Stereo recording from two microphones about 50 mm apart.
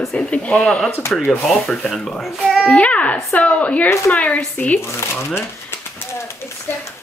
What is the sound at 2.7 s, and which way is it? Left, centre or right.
A woman's voice, left.